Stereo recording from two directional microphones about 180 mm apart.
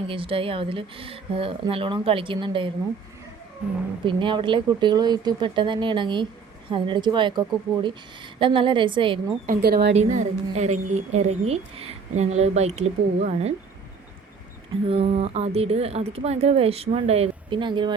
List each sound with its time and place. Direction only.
0.1 s speech: 30° right (ahead or behind)
4.0 s speech: 25° right (ahead or behind)
9.5 s speech: 60° right (ahead or behind)
9.9 s a woman's voice: 40° right (ahead or behind)
14.8 s a woman's voice: 30° right (ahead or behind)